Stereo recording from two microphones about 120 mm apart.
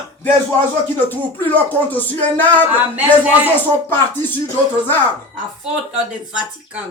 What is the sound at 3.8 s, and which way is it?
Music, 15° left (ahead or behind).